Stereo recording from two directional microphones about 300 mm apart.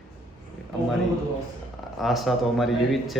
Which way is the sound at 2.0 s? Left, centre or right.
Centre.